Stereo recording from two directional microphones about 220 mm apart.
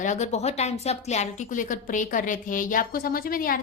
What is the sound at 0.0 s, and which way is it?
A woman's voice, 30° left (ahead or behind).